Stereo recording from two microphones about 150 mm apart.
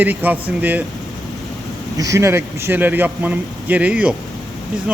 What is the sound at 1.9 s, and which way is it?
Speech, 20° right (ahead or behind).